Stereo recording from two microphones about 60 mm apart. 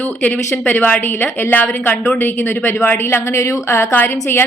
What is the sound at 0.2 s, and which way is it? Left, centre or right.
A woman's voice, left.